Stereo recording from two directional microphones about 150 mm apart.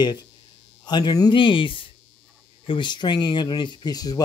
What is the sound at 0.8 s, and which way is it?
A man's voice, 30° left (ahead or behind).